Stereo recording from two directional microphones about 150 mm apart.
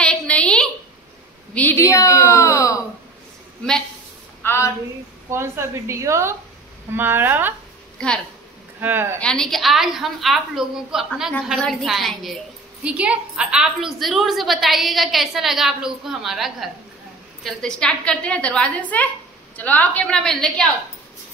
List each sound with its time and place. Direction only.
0.0 s a sound: 5° left (ahead or behind)
1.5 s a woman's voice: 10° left (ahead or behind)
4.4 s a woman's voice: 15° left (ahead or behind)
5.3 s a woman's voice: 15° right (ahead or behind)
8.8 s a woman's voice: 15° right (ahead or behind)
9.2 s a woman's voice: 5° left (ahead or behind)